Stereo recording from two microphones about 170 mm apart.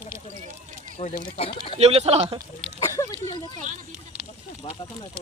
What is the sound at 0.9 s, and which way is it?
Speech, 35° left (ahead or behind).